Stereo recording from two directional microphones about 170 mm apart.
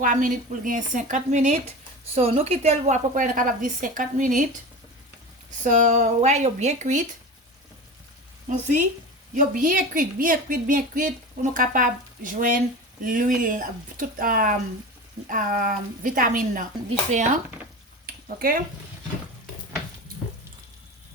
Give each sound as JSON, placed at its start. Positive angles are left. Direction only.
{"t": 0.0, "sound": "a woman's voice", "side_deg": -50}
{"t": 5.6, "sound": "a woman's voice", "side_deg": -45}
{"t": 8.4, "sound": "a woman's voice", "side_deg": -50}
{"t": 18.0, "sound": "a sound", "side_deg": -60}